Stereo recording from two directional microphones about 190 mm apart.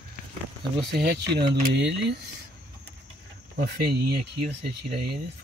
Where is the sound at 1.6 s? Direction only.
50° right (ahead or behind).